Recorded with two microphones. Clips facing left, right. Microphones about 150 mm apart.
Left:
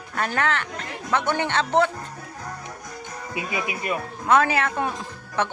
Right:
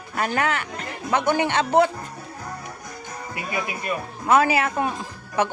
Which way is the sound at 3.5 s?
15° left (ahead or behind).